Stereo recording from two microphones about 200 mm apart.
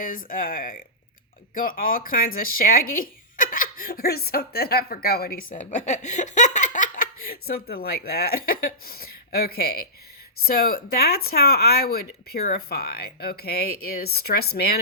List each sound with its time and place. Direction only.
0.0 s speech: 45° left (ahead or behind)